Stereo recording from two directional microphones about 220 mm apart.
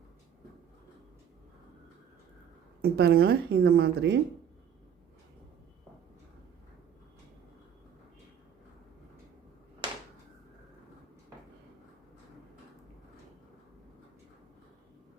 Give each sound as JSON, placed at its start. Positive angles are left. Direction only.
{"t": 2.8, "sound": "a woman's voice", "side_deg": -45}